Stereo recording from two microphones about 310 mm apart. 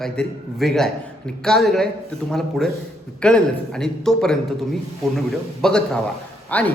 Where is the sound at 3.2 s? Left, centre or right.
Centre.